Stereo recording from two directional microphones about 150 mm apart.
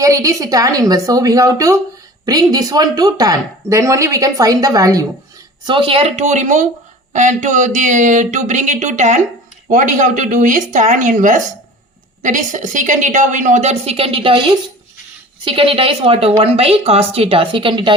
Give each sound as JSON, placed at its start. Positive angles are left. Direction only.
{"t": 0.0, "sound": "speech", "side_deg": -20}
{"t": 5.6, "sound": "a woman's voice", "side_deg": -35}
{"t": 15.4, "sound": "a woman's voice", "side_deg": -35}